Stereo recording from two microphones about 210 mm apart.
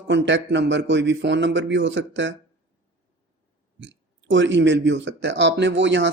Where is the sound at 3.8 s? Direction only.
60° right (ahead or behind).